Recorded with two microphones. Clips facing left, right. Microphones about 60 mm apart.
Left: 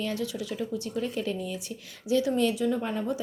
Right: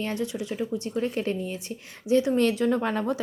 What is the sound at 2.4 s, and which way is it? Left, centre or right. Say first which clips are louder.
Speech: right 3 dB; right.